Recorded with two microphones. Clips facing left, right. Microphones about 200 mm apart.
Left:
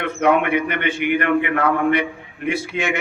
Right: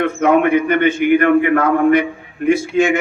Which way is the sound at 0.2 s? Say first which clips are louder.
Right 3 dB; 45° right (ahead or behind).